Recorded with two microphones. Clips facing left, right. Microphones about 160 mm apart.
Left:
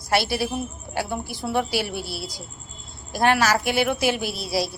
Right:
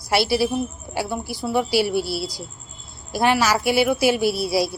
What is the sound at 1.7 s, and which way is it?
Speech, 50° left (ahead or behind).